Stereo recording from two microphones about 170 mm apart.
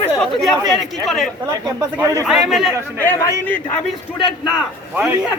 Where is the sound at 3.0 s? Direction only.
15° left (ahead or behind).